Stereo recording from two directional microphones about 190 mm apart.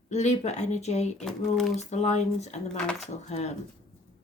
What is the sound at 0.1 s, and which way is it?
Speech, 35° left (ahead or behind).